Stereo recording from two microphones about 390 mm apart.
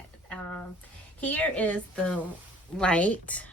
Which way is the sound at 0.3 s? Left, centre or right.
Centre.